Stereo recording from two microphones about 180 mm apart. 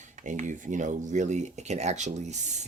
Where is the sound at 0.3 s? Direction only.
45° right (ahead or behind).